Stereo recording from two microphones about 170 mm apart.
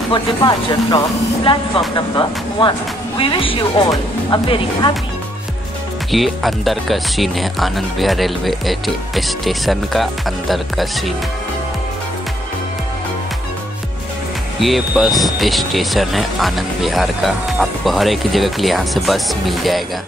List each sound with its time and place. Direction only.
0.1 s speech: 25° left (ahead or behind)
6.1 s speech: centre (ahead or behind)
14.6 s speech: centre (ahead or behind)